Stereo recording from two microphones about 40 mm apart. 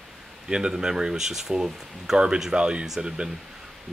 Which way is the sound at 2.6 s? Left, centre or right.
Right.